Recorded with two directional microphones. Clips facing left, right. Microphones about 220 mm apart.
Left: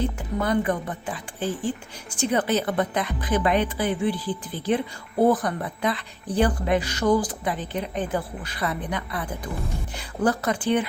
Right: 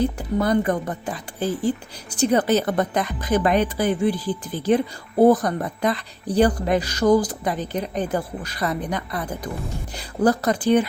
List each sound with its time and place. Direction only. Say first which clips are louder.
0.2 s a woman's voice: right 4 dB; 40° right (ahead or behind)